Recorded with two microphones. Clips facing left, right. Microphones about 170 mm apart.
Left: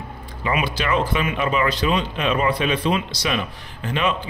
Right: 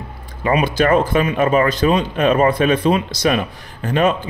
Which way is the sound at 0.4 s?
40° right (ahead or behind).